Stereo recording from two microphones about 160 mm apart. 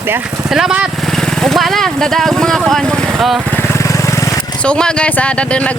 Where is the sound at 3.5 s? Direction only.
15° left (ahead or behind).